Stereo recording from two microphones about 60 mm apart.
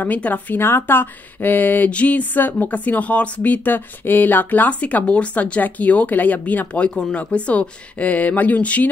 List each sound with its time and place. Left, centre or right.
0.0 s speech: left
0.6 s speech: left